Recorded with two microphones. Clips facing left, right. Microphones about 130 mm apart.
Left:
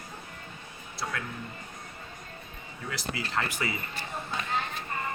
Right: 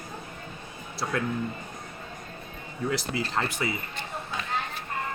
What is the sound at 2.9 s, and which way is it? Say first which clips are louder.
Speech: right 1 dB; 25° right (ahead or behind).